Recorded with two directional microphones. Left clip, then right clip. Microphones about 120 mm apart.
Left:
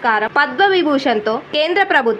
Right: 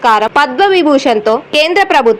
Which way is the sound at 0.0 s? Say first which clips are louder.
Right 6 dB; 30° right (ahead or behind).